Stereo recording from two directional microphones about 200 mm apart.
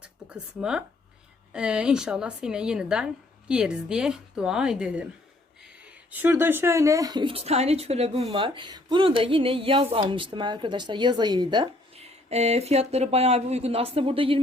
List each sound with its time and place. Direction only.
0.0 s a woman's voice: 5° right (ahead or behind); by 14.3 s 25° right (ahead or behind)